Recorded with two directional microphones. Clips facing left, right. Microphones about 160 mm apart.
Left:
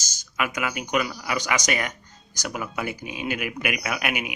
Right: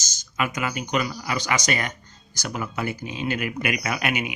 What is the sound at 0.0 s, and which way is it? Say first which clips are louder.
Speech: right 1 dB; 10° left (ahead or behind).